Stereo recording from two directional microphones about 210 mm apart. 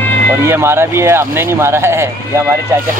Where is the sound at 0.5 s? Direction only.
10° right (ahead or behind).